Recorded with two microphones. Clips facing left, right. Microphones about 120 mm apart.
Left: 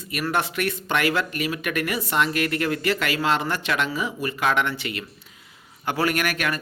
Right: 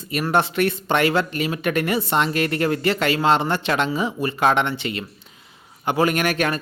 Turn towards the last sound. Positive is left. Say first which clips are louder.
# right 4 dB
turn(degrees=-25)  # may be behind; listen again after turning